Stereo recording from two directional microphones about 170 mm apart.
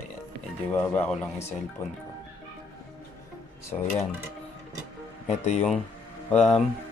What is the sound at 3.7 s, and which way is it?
Speech, 35° left (ahead or behind).